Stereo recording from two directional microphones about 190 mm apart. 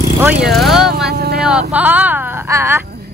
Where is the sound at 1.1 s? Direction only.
55° right (ahead or behind).